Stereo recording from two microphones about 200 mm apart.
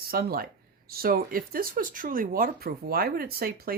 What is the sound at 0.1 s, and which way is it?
Speech, 50° right (ahead or behind).